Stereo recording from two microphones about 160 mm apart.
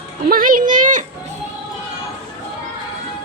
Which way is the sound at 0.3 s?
60° right (ahead or behind).